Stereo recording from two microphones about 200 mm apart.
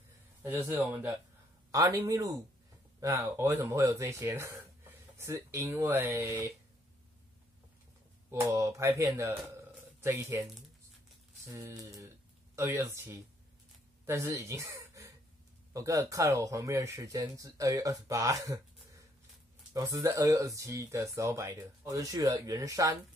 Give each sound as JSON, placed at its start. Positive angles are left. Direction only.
{"t": 0.4, "sound": "speech", "side_deg": -10}
{"t": 8.3, "sound": "speech", "side_deg": -15}
{"t": 19.7, "sound": "speech", "side_deg": -15}